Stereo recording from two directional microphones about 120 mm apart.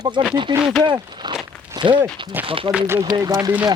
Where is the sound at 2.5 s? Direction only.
50° right (ahead or behind).